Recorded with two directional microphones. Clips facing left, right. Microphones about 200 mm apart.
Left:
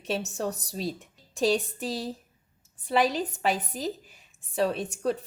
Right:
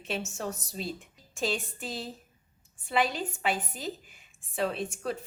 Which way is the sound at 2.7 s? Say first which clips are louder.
Left 4 dB; 40° left (ahead or behind).